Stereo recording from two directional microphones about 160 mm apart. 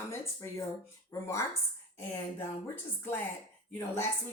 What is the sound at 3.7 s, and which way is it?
Speech, 20° left (ahead or behind).